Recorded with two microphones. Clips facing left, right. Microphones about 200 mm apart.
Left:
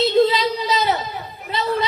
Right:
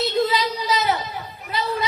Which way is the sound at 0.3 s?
25° left (ahead or behind).